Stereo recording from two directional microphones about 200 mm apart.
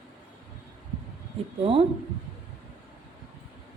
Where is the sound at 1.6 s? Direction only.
25° right (ahead or behind).